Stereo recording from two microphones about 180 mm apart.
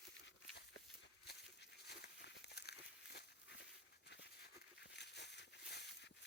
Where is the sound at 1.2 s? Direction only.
65° left (ahead or behind).